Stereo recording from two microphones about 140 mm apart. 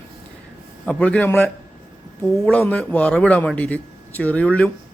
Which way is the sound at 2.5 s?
10° left (ahead or behind).